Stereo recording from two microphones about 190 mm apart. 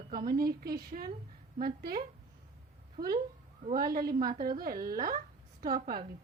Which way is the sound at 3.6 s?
50° right (ahead or behind).